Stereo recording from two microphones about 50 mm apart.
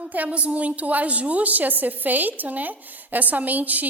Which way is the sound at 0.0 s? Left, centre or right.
Right.